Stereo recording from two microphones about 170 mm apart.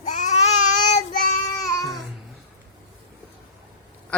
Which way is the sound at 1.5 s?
20° left (ahead or behind).